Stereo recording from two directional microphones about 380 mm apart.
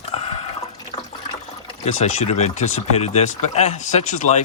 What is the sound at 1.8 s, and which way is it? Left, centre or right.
A man's voice, centre.